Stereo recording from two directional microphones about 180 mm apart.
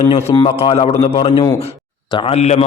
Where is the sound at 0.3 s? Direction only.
30° left (ahead or behind).